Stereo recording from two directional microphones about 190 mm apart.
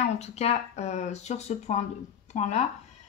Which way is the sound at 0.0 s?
35° left (ahead or behind).